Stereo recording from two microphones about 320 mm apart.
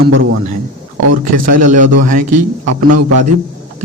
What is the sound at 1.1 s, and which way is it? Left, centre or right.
A man's voice, right.